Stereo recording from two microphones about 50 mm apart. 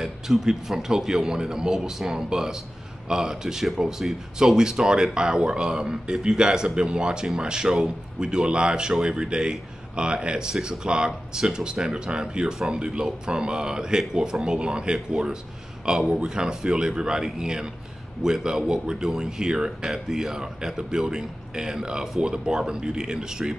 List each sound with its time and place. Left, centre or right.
0.0 s a man's voice: centre